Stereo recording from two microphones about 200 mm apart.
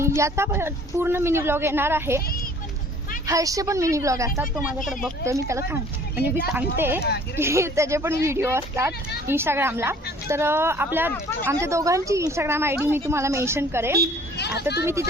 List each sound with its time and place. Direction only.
0.0 s a woman's voice: 15° right (ahead or behind)
3.2 s a woman's voice: 15° right (ahead or behind)
4.9 s speech: centre (ahead or behind)
5.2 s a woman's voice: 15° right (ahead or behind)
14.3 s speech: 55° left (ahead or behind)